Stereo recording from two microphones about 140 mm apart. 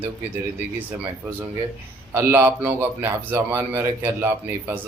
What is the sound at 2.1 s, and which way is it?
A man's voice, 15° right (ahead or behind).